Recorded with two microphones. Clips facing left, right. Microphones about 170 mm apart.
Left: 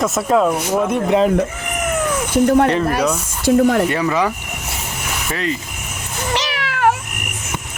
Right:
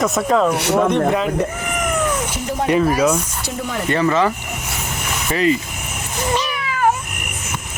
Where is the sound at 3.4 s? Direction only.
55° left (ahead or behind).